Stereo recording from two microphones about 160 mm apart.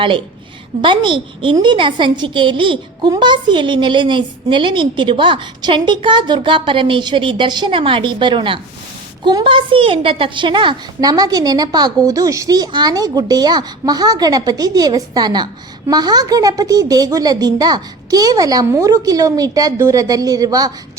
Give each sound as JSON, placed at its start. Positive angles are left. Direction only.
{"t": 0.8, "sound": "a woman's voice", "side_deg": -30}